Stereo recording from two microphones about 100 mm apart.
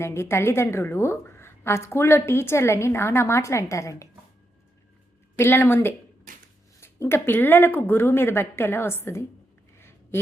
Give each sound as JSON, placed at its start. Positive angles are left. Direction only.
{"t": 0.0, "sound": "a woman's voice", "side_deg": 25}
{"t": 5.4, "sound": "a woman's voice", "side_deg": 20}
{"t": 9.7, "sound": "a sound", "side_deg": 25}